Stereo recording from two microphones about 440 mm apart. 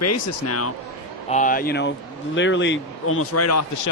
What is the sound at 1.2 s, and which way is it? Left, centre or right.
Speech, centre.